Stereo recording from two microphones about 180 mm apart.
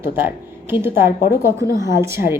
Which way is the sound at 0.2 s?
10° right (ahead or behind).